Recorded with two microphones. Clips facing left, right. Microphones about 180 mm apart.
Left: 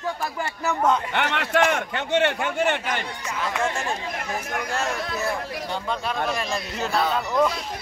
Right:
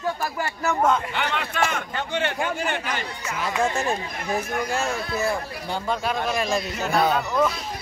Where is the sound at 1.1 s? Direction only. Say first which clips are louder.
Left 4 dB; 70° left (ahead or behind).